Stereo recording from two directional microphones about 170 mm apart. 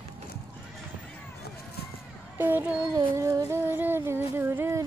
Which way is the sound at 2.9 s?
20° right (ahead or behind).